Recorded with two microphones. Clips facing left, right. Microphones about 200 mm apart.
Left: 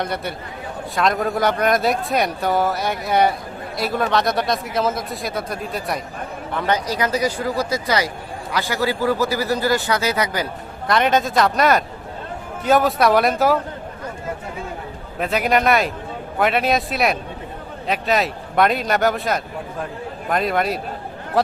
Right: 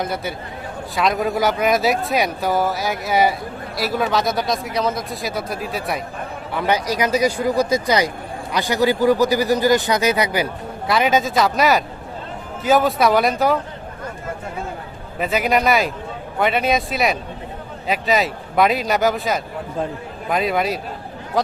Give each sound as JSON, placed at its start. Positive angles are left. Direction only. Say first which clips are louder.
{"t": 0.0, "sound": "a man's voice", "louder": "right 1 dB", "side_deg": 0}
{"t": 15.2, "sound": "speech", "louder": "even", "side_deg": 0}